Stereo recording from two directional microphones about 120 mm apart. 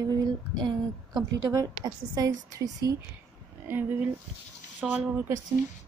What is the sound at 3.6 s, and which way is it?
Speech, 15° right (ahead or behind).